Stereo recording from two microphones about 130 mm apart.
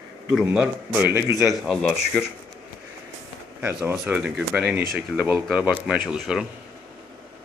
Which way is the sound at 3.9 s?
10° right (ahead or behind).